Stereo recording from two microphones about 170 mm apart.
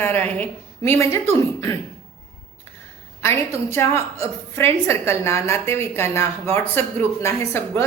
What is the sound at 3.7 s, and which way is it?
A woman's voice, 15° left (ahead or behind).